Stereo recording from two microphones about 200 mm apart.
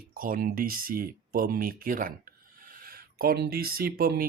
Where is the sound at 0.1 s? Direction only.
45° right (ahead or behind).